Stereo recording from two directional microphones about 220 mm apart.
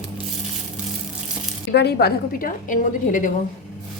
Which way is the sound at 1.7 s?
50° left (ahead or behind).